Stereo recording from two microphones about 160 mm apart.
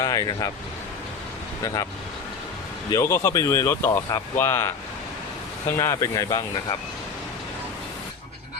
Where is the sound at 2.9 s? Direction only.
20° left (ahead or behind).